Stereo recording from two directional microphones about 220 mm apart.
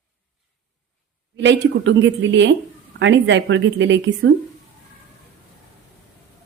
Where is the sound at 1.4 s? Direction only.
55° right (ahead or behind).